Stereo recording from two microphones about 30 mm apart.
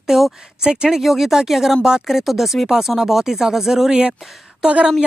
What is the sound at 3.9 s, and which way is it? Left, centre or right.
Speech, right.